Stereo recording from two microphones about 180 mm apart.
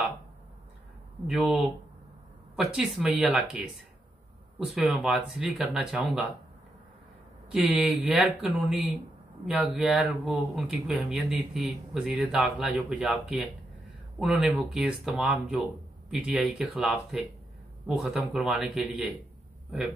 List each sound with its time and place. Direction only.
1.2 s speech: 5° right (ahead or behind)
4.7 s speech: centre (ahead or behind)
7.5 s speech: 5° right (ahead or behind)